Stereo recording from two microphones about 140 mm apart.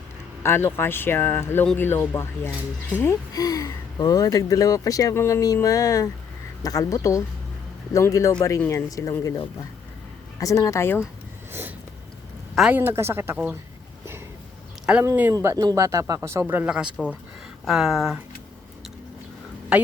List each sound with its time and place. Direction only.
0.4 s speech: 15° left (ahead or behind)
12.5 s speech: 5° right (ahead or behind)
12.8 s speech: 15° right (ahead or behind)
15.0 s speech: 15° right (ahead or behind)